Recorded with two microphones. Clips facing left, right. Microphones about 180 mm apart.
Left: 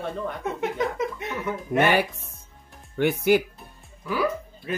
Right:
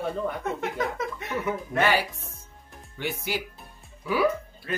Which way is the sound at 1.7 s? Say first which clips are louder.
Left 5 dB; 70° left (ahead or behind).